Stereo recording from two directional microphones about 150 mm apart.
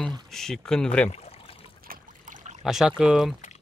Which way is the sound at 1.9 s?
60° right (ahead or behind).